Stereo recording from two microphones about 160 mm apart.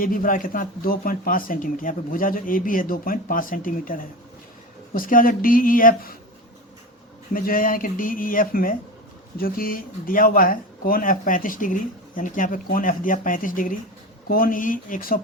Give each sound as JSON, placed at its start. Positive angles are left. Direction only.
{"t": 0.0, "sound": "speech", "side_deg": 60}
{"t": 7.3, "sound": "speech", "side_deg": 60}